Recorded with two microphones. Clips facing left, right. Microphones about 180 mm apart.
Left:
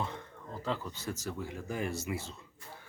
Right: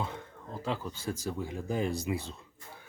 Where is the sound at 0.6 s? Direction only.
15° right (ahead or behind).